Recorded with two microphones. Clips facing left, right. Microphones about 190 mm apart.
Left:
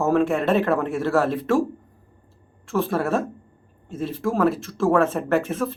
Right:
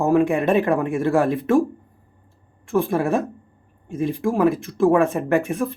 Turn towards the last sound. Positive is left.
turn(degrees=-15)  # may be behind; listen again after turning